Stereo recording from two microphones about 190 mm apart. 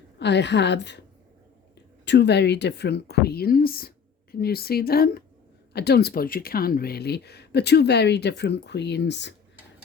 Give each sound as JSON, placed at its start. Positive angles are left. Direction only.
{"t": 0.2, "sound": "speech", "side_deg": 65}
{"t": 2.0, "sound": "speech", "side_deg": 60}